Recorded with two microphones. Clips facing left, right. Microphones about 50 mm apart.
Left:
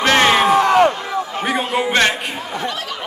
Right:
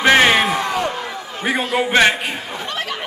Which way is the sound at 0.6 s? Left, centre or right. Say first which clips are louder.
Left 8 dB; left.